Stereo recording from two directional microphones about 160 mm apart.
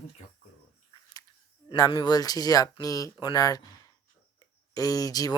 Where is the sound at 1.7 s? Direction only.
25° left (ahead or behind).